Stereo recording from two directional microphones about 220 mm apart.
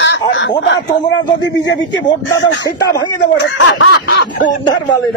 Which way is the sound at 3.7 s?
50° left (ahead or behind).